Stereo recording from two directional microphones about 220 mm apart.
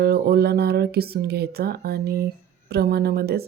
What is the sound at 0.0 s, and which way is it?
Speech, 45° right (ahead or behind).